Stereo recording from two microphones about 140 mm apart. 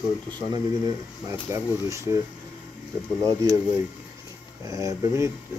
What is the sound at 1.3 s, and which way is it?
Speech, 20° right (ahead or behind).